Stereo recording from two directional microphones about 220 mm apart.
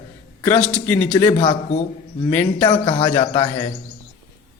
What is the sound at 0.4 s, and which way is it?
Speech, 5° left (ahead or behind).